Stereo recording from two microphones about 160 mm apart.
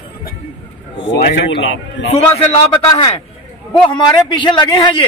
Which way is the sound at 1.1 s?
90° left.